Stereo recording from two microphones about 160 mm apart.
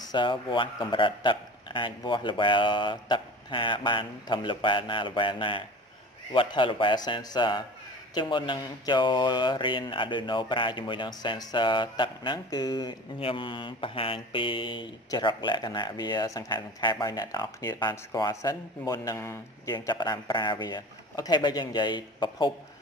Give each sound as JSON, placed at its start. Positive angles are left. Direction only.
{"t": 0.1, "sound": "a man's voice", "side_deg": 30}
{"t": 8.1, "sound": "mantra", "side_deg": 30}